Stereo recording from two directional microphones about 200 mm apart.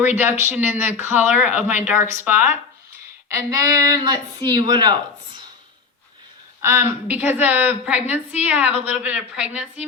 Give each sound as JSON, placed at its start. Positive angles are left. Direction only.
{"t": 0.4, "sound": "speech", "side_deg": -10}
{"t": 6.6, "sound": "speech", "side_deg": -15}